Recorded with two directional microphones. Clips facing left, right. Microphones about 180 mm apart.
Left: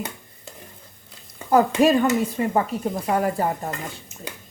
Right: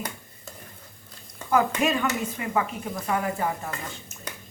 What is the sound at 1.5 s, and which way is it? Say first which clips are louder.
Speech: left 6 dB; 35° left (ahead or behind).